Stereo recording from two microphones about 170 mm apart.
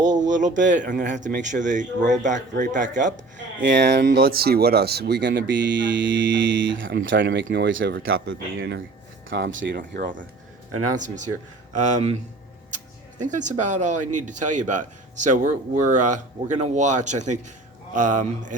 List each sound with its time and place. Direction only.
0.0 s speech: 45° right (ahead or behind)
3.3 s speech: 90° right
10.9 s speech: 45° right (ahead or behind)